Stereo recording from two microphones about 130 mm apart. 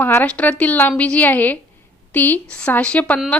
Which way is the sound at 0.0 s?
15° left (ahead or behind).